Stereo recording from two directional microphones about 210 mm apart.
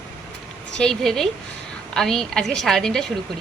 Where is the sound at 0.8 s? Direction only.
Centre (ahead or behind).